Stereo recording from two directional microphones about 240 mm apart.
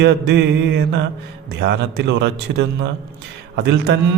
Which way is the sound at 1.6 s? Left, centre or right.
Right.